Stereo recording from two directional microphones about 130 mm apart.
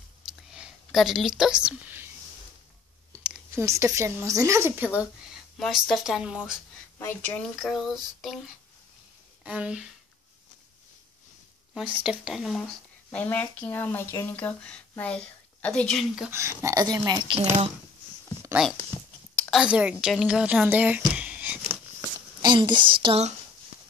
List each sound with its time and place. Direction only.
0.3 s a sound: 5° right (ahead or behind)
3.3 s speech: 20° right (ahead or behind)
5.6 s a woman's voice: centre (ahead or behind)
7.0 s speech: 15° left (ahead or behind)
7.5 s a woman's voice: centre (ahead or behind)
9.4 s speech: 10° right (ahead or behind)
11.7 s speech: 10° right (ahead or behind)
16.3 s speech: 20° right (ahead or behind)
19.5 s a woman's voice: 10° right (ahead or behind)
21.1 s a sound: 10° right (ahead or behind)
22.4 s speech: 35° right (ahead or behind)